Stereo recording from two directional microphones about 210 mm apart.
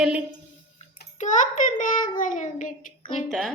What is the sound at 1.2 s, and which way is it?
A child's voice, 35° left (ahead or behind).